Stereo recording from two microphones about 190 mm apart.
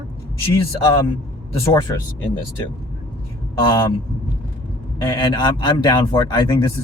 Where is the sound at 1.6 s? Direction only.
20° left (ahead or behind).